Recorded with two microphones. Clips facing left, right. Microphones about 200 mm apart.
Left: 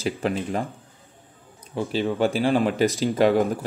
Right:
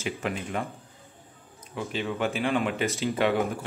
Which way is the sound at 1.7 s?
35° left (ahead or behind).